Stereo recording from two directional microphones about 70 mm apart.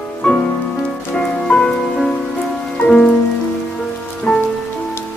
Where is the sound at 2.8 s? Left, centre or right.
Left.